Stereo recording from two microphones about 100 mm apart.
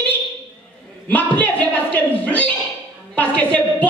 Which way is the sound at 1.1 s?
15° left (ahead or behind).